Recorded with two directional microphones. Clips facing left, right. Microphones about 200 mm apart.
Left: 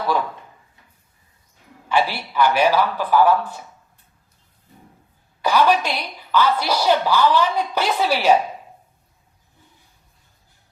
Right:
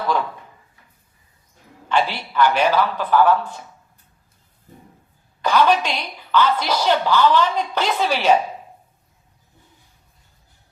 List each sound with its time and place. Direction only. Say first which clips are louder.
1.9 s a woman's voice: even; 10° left (ahead or behind)
5.4 s a woman's voice: even; 10° left (ahead or behind)